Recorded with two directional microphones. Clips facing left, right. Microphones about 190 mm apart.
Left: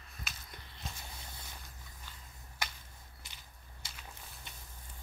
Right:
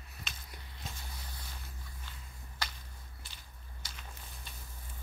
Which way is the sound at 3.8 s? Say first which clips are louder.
Right 1 dB; 25° left (ahead or behind).